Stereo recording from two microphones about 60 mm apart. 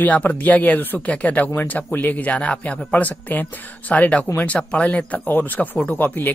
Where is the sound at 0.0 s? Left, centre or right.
Left.